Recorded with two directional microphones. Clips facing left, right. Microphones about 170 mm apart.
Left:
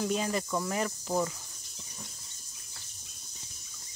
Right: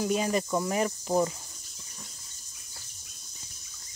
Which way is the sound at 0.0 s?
15° right (ahead or behind).